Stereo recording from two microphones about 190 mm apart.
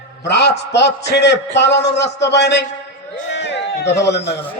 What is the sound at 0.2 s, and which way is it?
A man's voice, 65° left (ahead or behind).